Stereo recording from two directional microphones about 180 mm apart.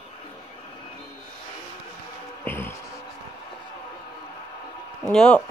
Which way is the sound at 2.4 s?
10° left (ahead or behind).